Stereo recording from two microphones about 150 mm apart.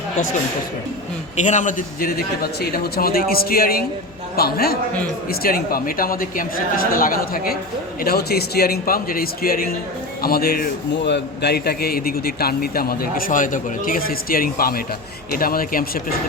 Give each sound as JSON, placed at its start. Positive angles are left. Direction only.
{"t": 1.4, "sound": "a man's voice", "side_deg": 55}
{"t": 8.0, "sound": "a man's voice", "side_deg": 90}